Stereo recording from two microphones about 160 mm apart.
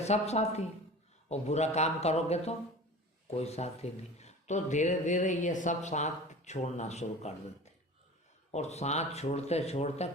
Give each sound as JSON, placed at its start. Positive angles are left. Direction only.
{"t": 0.0, "sound": "speech", "side_deg": 40}